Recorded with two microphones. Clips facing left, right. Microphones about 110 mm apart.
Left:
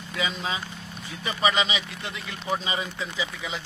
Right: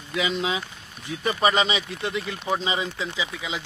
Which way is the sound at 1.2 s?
40° right (ahead or behind).